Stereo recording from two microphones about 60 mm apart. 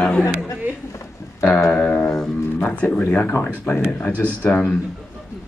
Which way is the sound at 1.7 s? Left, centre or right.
Centre.